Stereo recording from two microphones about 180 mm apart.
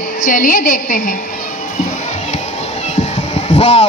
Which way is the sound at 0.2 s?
50° left (ahead or behind).